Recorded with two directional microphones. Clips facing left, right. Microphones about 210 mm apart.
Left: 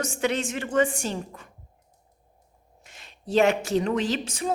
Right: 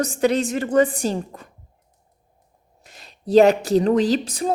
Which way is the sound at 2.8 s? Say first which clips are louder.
Right 7 dB; 35° right (ahead or behind).